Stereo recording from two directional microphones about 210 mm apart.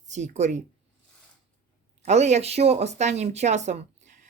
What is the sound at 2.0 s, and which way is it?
Speech, 30° right (ahead or behind).